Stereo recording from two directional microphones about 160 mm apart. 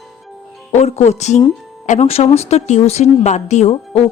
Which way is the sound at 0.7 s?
45° left (ahead or behind).